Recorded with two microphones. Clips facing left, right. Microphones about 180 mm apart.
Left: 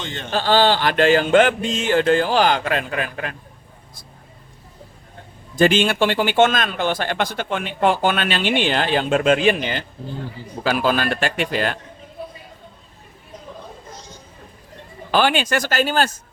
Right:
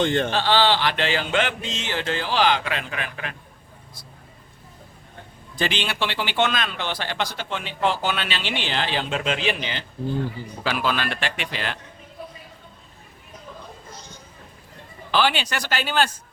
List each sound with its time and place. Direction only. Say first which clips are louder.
0.0 s speech: right 10 dB; 55° right (ahead or behind)
0.3 s speech: left 3 dB; 45° left (ahead or behind)
5.5 s speech: left 10 dB; 45° left (ahead or behind)
15.1 s speech: left 4 dB; 50° left (ahead or behind)